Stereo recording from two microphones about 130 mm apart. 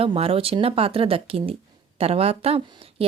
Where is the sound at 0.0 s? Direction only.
45° right (ahead or behind).